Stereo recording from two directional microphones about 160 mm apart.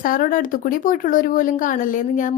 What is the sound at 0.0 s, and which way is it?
Speech, 60° left (ahead or behind).